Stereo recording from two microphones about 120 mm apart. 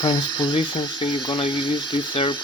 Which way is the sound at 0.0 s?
40° left (ahead or behind).